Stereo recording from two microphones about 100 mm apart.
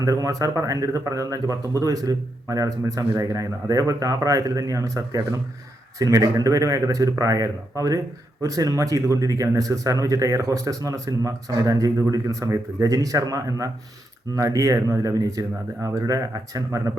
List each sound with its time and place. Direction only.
0.0 s speech: 35° right (ahead or behind)